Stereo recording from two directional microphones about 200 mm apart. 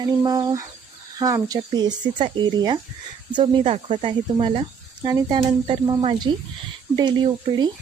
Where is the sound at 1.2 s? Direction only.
20° right (ahead or behind).